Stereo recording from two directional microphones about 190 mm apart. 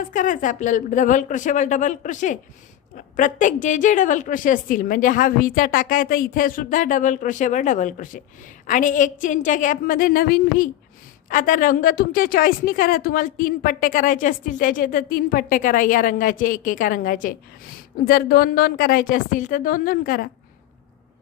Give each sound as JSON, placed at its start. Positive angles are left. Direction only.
{"t": 0.0, "sound": "a woman's voice", "side_deg": 45}